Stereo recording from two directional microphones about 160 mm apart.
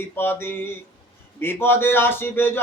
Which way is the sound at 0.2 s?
15° left (ahead or behind).